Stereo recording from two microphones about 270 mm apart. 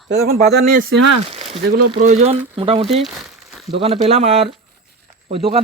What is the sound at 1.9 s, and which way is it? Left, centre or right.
Speech, right.